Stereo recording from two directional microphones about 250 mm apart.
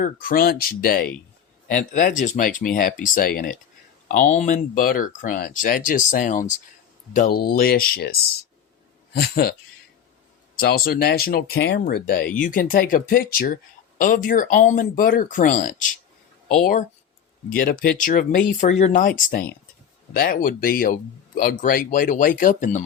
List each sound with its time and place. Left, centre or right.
0.0 s speech: left
9.1 s speech: left
10.6 s speech: left